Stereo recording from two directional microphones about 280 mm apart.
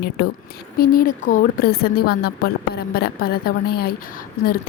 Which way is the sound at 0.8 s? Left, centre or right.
Left.